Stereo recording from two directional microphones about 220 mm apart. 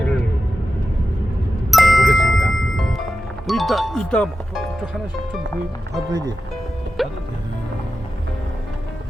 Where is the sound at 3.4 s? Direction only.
Centre (ahead or behind).